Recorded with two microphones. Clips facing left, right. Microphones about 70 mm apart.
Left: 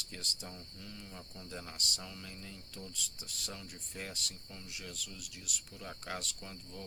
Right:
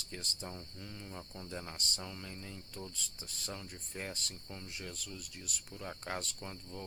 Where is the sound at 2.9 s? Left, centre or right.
Right.